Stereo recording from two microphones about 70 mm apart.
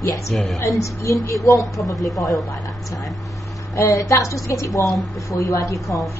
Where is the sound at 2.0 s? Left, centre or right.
Centre.